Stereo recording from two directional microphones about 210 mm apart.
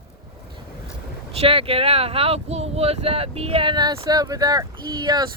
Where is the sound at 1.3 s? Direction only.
25° right (ahead or behind).